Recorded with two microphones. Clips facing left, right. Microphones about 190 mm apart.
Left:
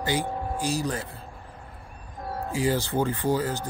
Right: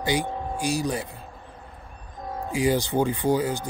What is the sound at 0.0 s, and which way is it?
Speech, 15° right (ahead or behind).